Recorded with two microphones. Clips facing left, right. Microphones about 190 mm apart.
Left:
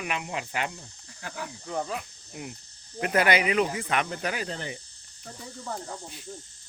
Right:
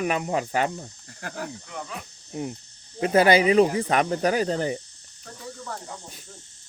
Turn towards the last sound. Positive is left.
turn(degrees=-40)  # may be behind; listen again after turning